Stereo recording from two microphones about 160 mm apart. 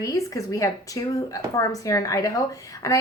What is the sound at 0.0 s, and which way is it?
A woman's voice, 20° left (ahead or behind).